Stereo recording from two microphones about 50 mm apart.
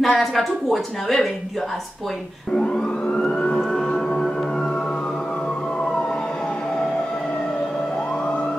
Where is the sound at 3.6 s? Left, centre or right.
Centre.